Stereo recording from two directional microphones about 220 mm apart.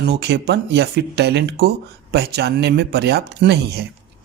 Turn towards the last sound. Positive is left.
turn(degrees=-50)  # may be behind; listen again after turning